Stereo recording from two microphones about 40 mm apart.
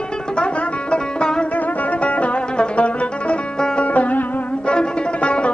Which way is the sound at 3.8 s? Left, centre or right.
Left.